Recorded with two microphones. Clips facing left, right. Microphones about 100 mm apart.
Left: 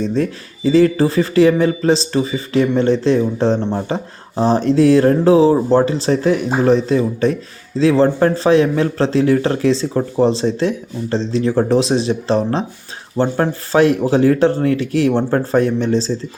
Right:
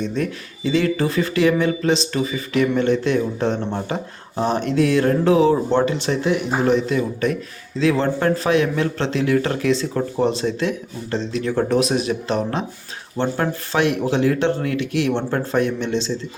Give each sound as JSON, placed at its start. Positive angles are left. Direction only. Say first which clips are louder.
{"t": 0.0, "sound": "speech", "louder": "left 5 dB", "side_deg": 35}